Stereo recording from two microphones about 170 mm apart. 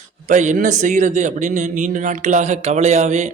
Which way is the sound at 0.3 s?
45° right (ahead or behind).